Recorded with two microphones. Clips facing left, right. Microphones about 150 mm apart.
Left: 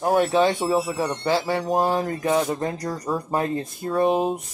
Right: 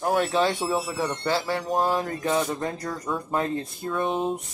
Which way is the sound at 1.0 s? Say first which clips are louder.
Left 2 dB; centre (ahead or behind).